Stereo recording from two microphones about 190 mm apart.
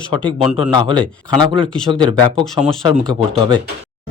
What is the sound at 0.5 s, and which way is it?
Speech, 30° right (ahead or behind).